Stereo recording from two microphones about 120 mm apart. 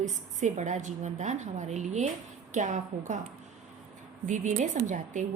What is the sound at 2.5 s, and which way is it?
Speech, 90° right.